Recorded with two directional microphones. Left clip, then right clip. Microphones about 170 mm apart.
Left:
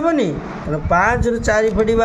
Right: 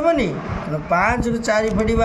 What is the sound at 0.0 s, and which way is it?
A man's voice, 50° left (ahead or behind).